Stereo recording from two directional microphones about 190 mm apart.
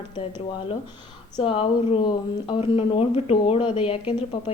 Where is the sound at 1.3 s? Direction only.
25° left (ahead or behind).